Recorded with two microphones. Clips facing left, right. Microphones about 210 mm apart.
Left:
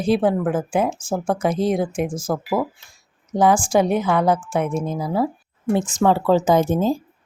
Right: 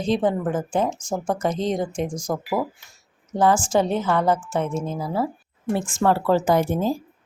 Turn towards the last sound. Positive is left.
turn(degrees=20)  # may be behind; listen again after turning